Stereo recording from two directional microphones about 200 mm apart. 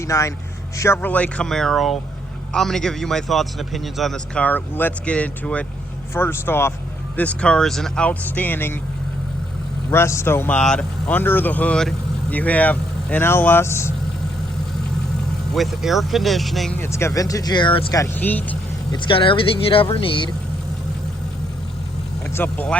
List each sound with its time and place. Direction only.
0.0 s a man's voice: 15° left (ahead or behind)
9.9 s speech: 15° left (ahead or behind)
15.5 s speech: centre (ahead or behind)
18.9 s speech: 25° left (ahead or behind)
22.3 s speech: 10° left (ahead or behind)